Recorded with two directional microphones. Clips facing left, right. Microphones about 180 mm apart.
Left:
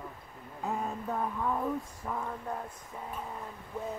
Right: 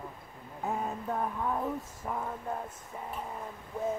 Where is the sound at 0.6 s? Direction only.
5° right (ahead or behind).